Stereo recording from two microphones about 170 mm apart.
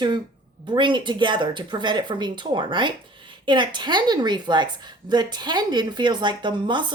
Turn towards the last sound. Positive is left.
turn(degrees=-25)  # may be behind; listen again after turning